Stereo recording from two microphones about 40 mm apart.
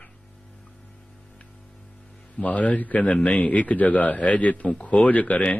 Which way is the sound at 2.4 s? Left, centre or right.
Left.